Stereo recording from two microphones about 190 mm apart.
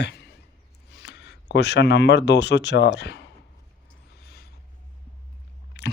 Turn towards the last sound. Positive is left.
turn(degrees=60)  # may be behind; listen again after turning